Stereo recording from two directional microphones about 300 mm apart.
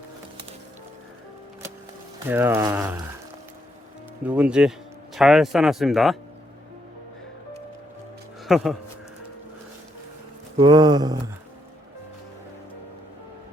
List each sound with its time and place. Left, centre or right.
2.2 s speech: centre
4.2 s speech: centre
8.4 s speech: centre
10.6 s speech: centre